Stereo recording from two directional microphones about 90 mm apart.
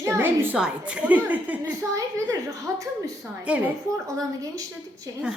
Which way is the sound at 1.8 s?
35° right (ahead or behind).